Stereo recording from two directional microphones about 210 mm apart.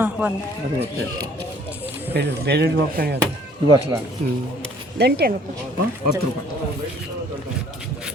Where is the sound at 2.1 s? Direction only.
50° right (ahead or behind).